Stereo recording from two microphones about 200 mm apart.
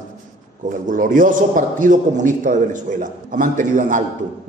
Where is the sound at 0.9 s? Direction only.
40° right (ahead or behind).